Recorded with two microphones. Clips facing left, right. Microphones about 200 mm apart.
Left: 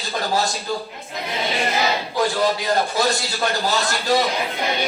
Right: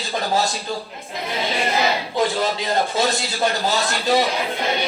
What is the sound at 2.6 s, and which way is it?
A man's voice, 15° right (ahead or behind).